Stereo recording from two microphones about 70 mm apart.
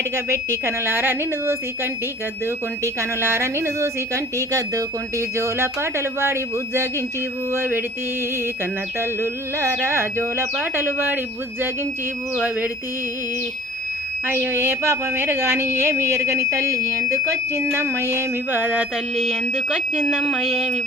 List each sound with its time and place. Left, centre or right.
0.3 s a woman's voice: right
9.0 s a woman's voice: right
14.3 s a woman's voice: right
17.6 s a woman's voice: right
19.1 s speech: centre